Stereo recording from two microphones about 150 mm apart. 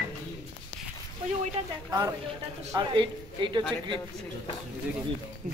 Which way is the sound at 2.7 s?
30° right (ahead or behind).